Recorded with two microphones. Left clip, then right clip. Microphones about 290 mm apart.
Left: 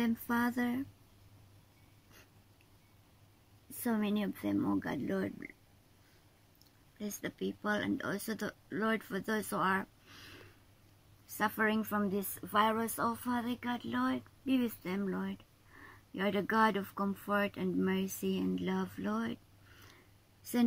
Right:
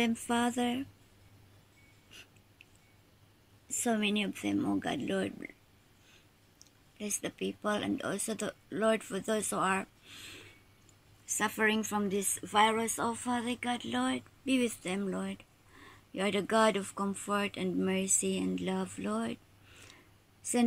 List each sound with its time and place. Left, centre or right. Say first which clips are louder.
0.0 s speech: right 3 dB; centre
3.8 s speech: right 4 dB; centre
7.6 s speech: right 2 dB; centre
11.3 s speech: right 2 dB; centre